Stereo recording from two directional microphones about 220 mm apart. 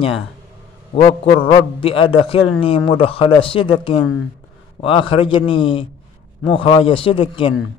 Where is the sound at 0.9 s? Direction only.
25° left (ahead or behind).